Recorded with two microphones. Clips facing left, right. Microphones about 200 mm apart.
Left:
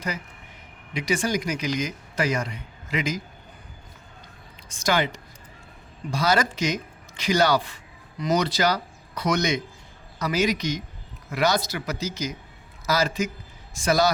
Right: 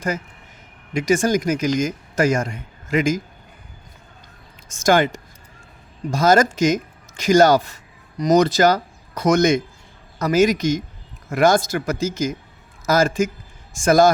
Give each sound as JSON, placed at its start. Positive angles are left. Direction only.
{"t": 0.9, "sound": "speech", "side_deg": -45}
{"t": 4.7, "sound": "a man's voice", "side_deg": -45}